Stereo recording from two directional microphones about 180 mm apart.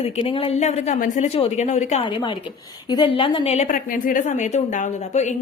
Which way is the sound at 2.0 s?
25° left (ahead or behind).